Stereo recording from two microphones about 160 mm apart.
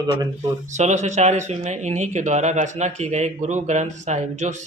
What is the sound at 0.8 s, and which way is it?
Speech, 45° right (ahead or behind).